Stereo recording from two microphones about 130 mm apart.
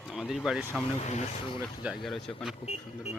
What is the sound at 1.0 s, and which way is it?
Speech, 60° left (ahead or behind).